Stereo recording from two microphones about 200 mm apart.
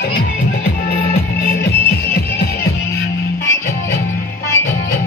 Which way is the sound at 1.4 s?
50° left (ahead or behind).